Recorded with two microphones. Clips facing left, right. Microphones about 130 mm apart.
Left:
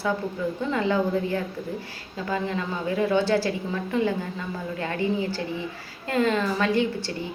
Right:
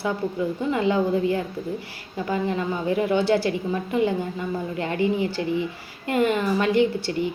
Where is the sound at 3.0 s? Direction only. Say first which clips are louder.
Even; 15° right (ahead or behind).